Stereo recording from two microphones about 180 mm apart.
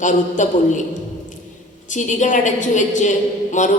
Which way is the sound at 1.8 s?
45° left (ahead or behind).